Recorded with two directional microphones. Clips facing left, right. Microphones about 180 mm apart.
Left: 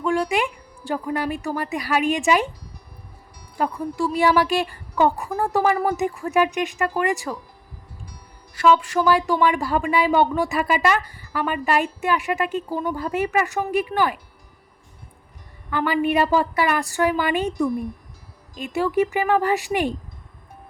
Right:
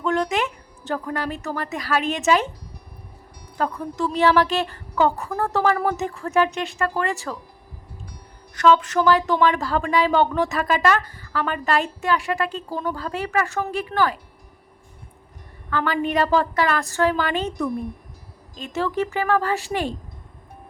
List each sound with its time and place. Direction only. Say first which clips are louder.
0.0 s speech: left 1 dB; 10° left (ahead or behind)
3.6 s speech: left 1 dB; 10° left (ahead or behind)
8.5 s speech: right 1 dB; 10° left (ahead or behind)
15.7 s speech: left 2 dB; 10° left (ahead or behind)